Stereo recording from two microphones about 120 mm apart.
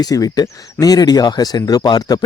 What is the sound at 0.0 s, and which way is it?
Speech, 30° left (ahead or behind).